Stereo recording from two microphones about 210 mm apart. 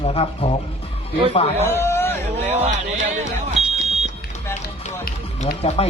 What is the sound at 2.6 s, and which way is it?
Speech, 35° right (ahead or behind).